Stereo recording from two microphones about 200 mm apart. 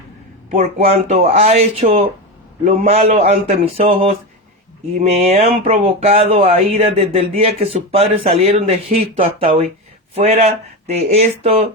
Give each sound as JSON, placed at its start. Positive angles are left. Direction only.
{"t": 0.5, "sound": "speech", "side_deg": -35}